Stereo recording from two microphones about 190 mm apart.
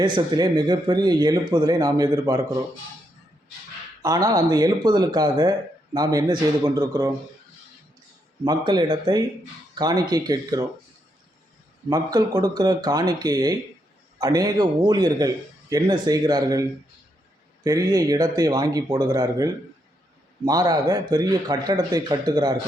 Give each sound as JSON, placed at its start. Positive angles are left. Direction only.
{"t": 0.0, "sound": "speech", "side_deg": -25}
{"t": 4.0, "sound": "speech", "side_deg": -20}
{"t": 8.4, "sound": "speech", "side_deg": -20}
{"t": 11.9, "sound": "speech", "side_deg": -20}